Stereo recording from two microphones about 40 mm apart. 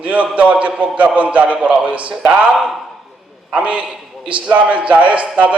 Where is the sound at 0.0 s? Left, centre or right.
Right.